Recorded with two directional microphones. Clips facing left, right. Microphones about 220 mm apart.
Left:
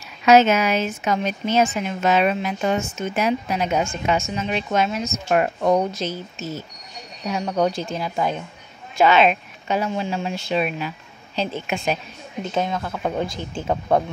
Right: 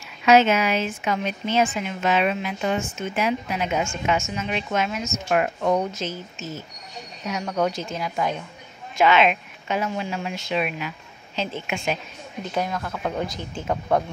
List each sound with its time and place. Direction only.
0.2 s a woman's voice: 40° left (ahead or behind)
7.2 s a woman's voice: 30° left (ahead or behind)
12.5 s speech: 25° left (ahead or behind)